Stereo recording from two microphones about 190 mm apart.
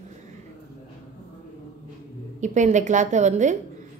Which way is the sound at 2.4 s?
40° right (ahead or behind).